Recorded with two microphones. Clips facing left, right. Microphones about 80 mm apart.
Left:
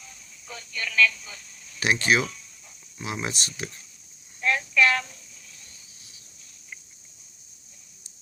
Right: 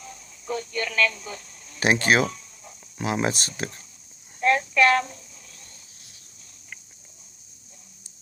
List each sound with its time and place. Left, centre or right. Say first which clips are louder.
0.0 s speech: right 8 dB; right